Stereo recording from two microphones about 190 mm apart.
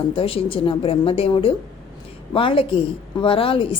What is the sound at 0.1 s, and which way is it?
A woman's voice, 30° left (ahead or behind).